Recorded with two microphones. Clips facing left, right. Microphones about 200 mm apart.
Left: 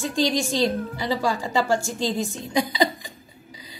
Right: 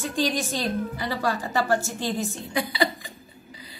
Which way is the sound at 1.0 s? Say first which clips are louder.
Left 5 dB; 15° left (ahead or behind).